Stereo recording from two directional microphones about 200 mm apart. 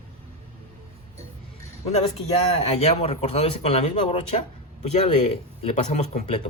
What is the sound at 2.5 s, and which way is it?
Speech, 30° left (ahead or behind).